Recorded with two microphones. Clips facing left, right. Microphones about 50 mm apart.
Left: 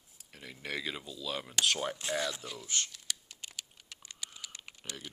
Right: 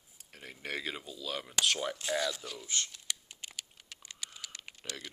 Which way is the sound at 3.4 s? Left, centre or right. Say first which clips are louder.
Right 1 dB; centre.